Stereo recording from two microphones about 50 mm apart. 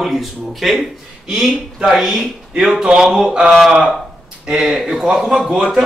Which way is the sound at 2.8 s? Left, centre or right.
Centre.